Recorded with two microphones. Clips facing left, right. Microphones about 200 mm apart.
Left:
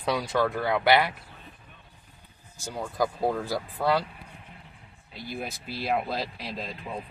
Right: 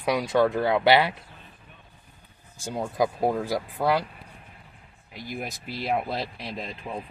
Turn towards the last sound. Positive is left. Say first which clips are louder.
# right 1 dB
turn(degrees=-5)  # may be behind; listen again after turning